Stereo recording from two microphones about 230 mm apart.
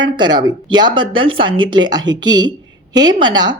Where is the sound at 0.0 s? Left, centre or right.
Centre.